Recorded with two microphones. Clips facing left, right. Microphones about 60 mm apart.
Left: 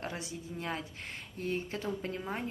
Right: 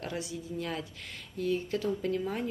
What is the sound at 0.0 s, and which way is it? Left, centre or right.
A woman's voice, left.